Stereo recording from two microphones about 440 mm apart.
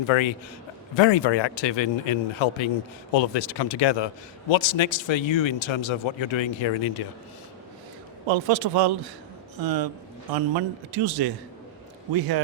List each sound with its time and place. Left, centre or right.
0.1 s a man's voice: left
0.9 s speech: left
3.1 s a man's voice: left
8.3 s speech: right
9.6 s a man's voice: right